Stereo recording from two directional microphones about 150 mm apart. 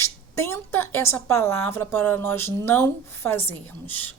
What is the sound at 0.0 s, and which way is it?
Speech, 20° left (ahead or behind).